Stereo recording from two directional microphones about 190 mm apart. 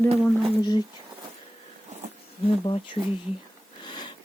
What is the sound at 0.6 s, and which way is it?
Speech, 20° left (ahead or behind).